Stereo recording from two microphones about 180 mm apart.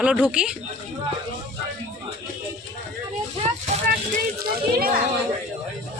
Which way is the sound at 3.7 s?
35° right (ahead or behind).